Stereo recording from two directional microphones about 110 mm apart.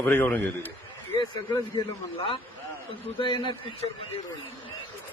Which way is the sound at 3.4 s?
50° left (ahead or behind).